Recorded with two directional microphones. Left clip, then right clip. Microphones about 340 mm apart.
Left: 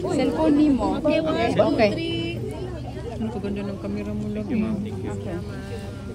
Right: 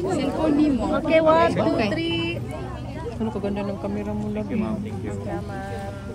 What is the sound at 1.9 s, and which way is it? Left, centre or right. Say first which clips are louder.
Music: right 1 dB; right.